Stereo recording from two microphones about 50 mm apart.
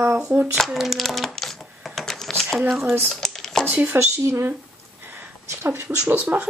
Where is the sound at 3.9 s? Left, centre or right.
Right.